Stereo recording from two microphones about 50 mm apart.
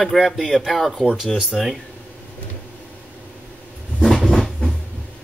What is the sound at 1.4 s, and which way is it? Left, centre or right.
Speech, centre.